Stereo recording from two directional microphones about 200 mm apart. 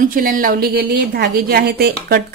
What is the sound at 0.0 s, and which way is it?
A woman's voice, 45° right (ahead or behind).